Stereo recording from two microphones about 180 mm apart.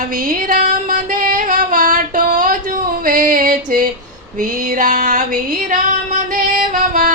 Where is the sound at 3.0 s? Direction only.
50° right (ahead or behind).